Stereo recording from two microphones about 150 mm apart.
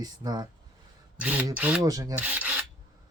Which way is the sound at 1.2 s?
10° right (ahead or behind).